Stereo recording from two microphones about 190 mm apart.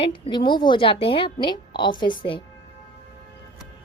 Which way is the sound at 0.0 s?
25° left (ahead or behind).